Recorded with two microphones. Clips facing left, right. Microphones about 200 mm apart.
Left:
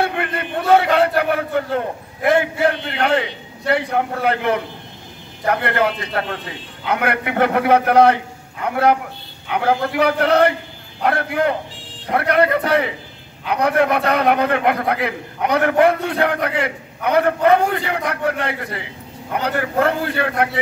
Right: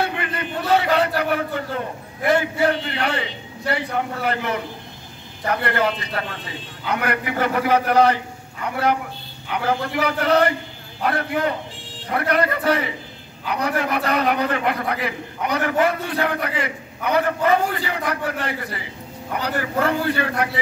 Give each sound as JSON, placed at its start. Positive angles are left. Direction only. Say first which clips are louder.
{"t": 0.0, "sound": "a man's voice", "louder": "left 3 dB", "side_deg": 55}